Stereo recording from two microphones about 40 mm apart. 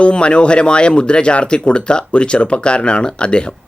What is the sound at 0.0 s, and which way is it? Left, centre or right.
Speech, left.